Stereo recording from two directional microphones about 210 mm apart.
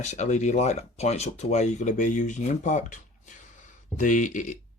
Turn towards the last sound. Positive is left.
turn(degrees=35)  # may be behind; listen again after turning